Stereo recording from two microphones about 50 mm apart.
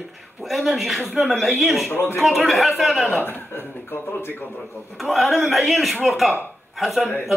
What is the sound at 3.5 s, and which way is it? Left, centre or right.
Speech, left.